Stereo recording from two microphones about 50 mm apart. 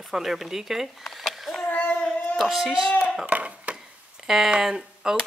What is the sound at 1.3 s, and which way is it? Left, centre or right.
Child singing, centre.